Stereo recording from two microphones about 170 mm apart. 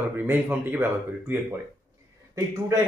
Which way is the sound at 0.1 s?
10° right (ahead or behind).